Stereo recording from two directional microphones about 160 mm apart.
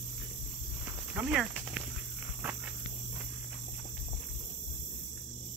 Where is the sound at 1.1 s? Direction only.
10° right (ahead or behind).